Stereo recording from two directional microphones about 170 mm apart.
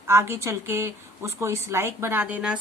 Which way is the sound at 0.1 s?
15° right (ahead or behind).